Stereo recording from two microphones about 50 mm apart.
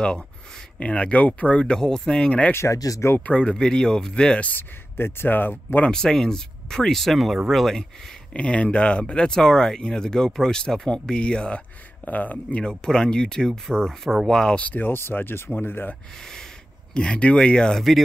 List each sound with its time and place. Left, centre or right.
0.7 s speech: left
2.5 s speech: left
3.2 s speech: left
4.5 s speech: left
5.9 s speech: centre
8.3 s speech: left
12.6 s speech: centre
14.6 s speech: left
16.9 s speech: centre